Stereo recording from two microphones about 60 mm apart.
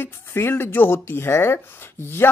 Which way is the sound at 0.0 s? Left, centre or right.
Left.